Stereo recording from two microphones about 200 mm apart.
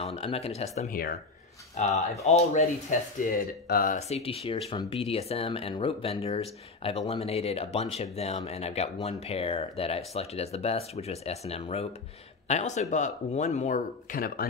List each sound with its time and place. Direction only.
0.0 s a sound: 30° left (ahead or behind)
0.6 s speech: 35° left (ahead or behind)
2.2 s speech: 35° left (ahead or behind)
4.1 s speech: 30° left (ahead or behind); by 14.5 s 45° left (ahead or behind)